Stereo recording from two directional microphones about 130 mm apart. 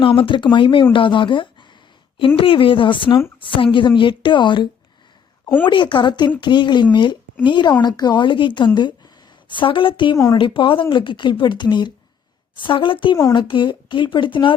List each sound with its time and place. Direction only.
0.0 s speech: 40° left (ahead or behind)